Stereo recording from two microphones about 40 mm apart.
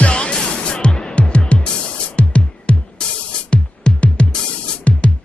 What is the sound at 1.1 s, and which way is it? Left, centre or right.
Music, left.